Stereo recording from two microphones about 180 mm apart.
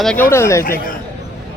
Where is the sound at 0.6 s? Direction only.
50° left (ahead or behind).